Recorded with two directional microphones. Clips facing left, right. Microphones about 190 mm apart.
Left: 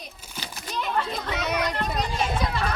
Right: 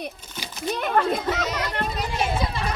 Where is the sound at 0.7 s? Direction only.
55° right (ahead or behind).